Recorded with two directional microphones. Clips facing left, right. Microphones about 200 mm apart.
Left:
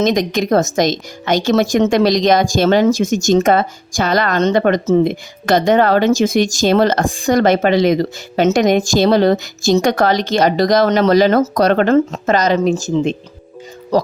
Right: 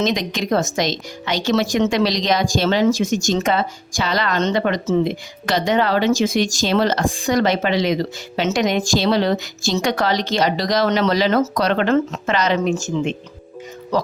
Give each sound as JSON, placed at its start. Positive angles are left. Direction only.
{"t": 0.0, "sound": "speech", "side_deg": 45}